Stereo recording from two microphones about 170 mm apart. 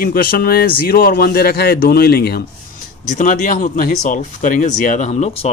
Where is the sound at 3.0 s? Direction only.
45° left (ahead or behind).